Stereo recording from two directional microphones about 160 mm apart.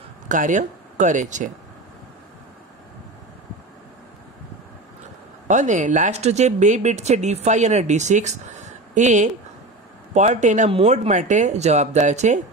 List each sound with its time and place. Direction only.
0.3 s speech: 50° right (ahead or behind)
5.5 s speech: 50° right (ahead or behind)